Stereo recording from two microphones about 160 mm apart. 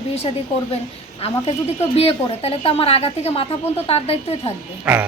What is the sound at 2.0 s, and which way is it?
A woman's voice, 40° left (ahead or behind).